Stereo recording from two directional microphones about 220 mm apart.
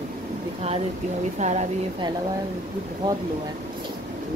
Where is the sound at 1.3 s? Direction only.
30° right (ahead or behind).